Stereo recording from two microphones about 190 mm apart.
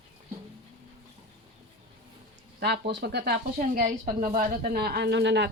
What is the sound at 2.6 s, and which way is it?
Speech, 60° right (ahead or behind).